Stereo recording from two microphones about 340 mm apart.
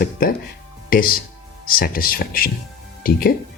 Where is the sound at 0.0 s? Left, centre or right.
Left.